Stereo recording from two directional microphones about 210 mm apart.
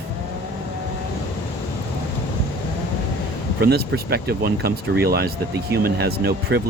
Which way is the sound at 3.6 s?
50° right (ahead or behind).